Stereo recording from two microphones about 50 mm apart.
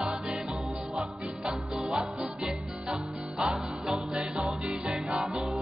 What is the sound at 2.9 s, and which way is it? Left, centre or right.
Music, centre.